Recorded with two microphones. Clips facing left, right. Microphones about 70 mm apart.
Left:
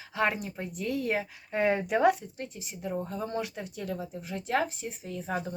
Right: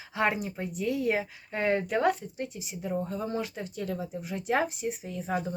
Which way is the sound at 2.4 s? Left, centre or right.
Centre.